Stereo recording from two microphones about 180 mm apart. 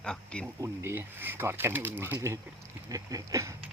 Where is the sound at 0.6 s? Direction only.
15° right (ahead or behind).